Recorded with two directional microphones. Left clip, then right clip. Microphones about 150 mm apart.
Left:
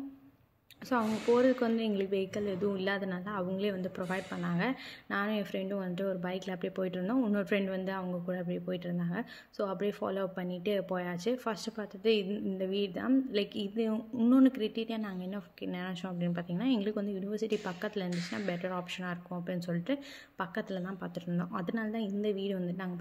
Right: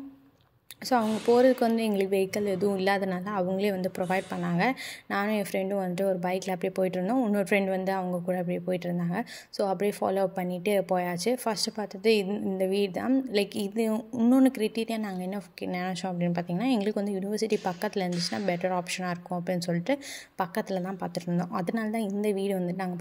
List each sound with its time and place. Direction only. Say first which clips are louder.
0.8 s a woman's voice: right 6 dB; 30° right (ahead or behind)